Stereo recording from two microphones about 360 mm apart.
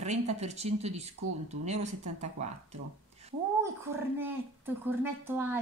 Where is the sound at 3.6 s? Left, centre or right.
Centre.